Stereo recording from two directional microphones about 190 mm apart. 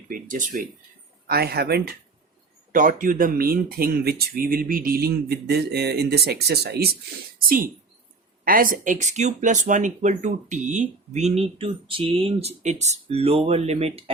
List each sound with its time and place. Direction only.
0.1 s speech: 45° right (ahead or behind)
1.3 s speech: 55° right (ahead or behind)
2.7 s speech: 45° right (ahead or behind)